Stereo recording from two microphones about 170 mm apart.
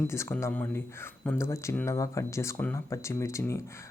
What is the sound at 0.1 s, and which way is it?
Speech, 15° left (ahead or behind).